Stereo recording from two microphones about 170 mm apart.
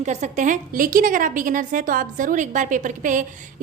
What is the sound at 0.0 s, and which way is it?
A woman's voice, 45° right (ahead or behind).